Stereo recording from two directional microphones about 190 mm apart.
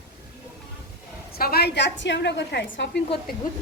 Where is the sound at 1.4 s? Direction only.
55° left (ahead or behind).